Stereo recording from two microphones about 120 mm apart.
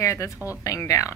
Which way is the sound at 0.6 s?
30° left (ahead or behind).